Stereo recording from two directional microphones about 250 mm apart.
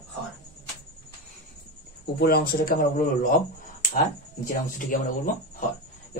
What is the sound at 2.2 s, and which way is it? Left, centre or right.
Speech, left.